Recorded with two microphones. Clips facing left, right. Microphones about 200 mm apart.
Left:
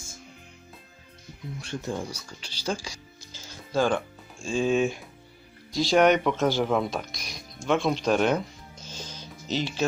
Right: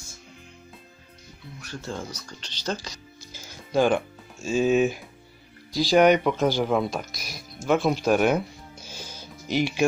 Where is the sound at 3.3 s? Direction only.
15° right (ahead or behind).